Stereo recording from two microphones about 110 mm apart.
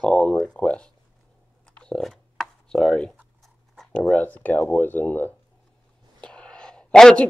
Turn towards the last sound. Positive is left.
turn(degrees=5)  # may be behind; listen again after turning